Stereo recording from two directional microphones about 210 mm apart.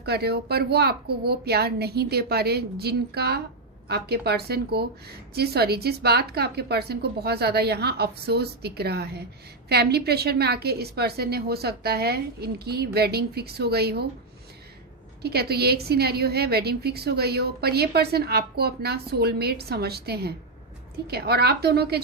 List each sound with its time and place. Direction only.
0.0 s a woman's voice: 50° right (ahead or behind)
15.2 s a woman's voice: 50° right (ahead or behind)